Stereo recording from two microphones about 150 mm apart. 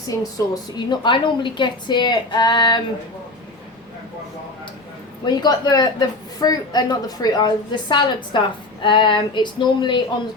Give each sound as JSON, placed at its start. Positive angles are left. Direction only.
{"t": 0.2, "sound": "a woman's voice", "side_deg": 25}
{"t": 5.2, "sound": "a woman's voice", "side_deg": 30}
{"t": 8.8, "sound": "a sound", "side_deg": 30}